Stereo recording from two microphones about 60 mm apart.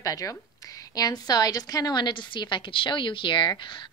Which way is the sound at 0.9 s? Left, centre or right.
Left.